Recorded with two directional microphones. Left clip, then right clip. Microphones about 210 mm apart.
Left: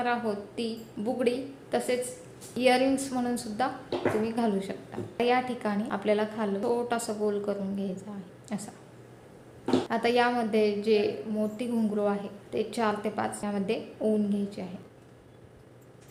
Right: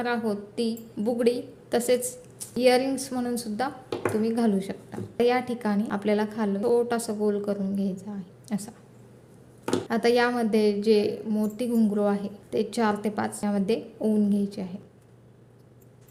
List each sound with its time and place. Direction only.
0.0 s a woman's voice: 35° right (ahead or behind)
9.9 s a woman's voice: 40° right (ahead or behind)